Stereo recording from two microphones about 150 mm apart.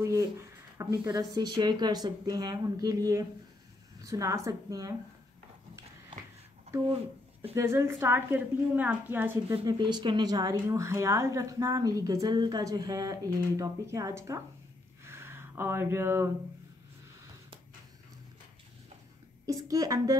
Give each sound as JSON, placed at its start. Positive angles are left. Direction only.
{"t": 0.0, "sound": "a woman's voice", "side_deg": -20}
{"t": 7.5, "sound": "a woman's voice", "side_deg": -20}
{"t": 9.7, "sound": "a woman's voice", "side_deg": -30}
{"t": 15.0, "sound": "a sound", "side_deg": -15}
{"t": 19.4, "sound": "a woman's voice", "side_deg": -25}